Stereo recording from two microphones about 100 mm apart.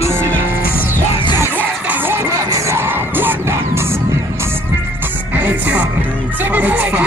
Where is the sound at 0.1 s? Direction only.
25° right (ahead or behind).